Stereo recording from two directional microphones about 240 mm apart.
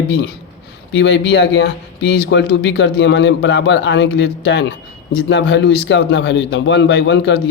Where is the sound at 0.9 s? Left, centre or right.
Left.